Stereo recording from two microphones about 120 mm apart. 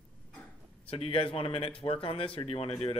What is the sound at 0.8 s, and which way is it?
Speech, 50° left (ahead or behind).